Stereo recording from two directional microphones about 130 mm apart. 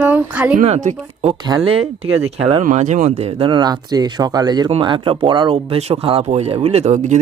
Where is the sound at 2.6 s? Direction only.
70° right (ahead or behind).